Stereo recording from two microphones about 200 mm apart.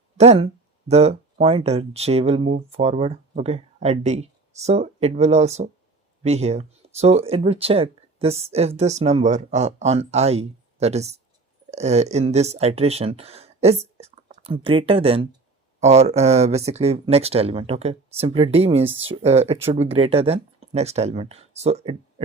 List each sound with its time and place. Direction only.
0.2 s speech: 30° right (ahead or behind)